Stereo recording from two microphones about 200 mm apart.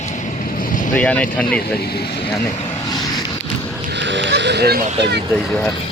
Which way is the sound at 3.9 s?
65° right (ahead or behind).